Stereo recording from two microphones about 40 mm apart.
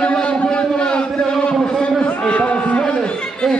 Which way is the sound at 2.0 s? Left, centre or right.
Left.